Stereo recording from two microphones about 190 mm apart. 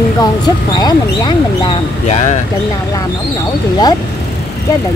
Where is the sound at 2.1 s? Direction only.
35° left (ahead or behind).